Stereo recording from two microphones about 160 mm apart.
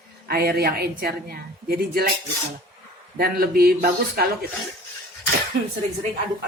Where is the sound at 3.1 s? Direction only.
75° right (ahead or behind).